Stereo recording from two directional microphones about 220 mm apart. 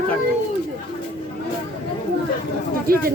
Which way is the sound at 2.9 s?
40° right (ahead or behind).